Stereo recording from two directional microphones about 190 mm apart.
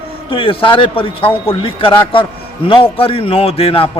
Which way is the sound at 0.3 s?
30° left (ahead or behind).